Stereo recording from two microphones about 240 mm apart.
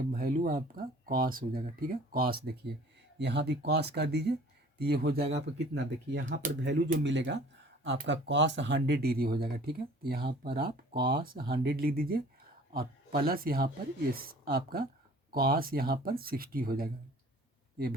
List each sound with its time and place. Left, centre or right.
0.1 s speech: right